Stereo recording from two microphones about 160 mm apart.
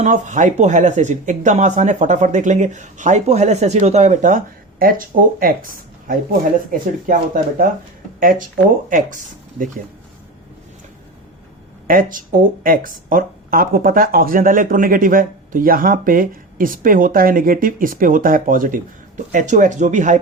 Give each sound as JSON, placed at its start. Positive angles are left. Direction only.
{"t": 0.0, "sound": "speech", "side_deg": -50}
{"t": 8.9, "sound": "speech", "side_deg": -55}
{"t": 11.9, "sound": "speech", "side_deg": -60}